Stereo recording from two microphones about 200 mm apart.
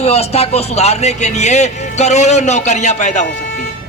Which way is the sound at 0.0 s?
30° left (ahead or behind).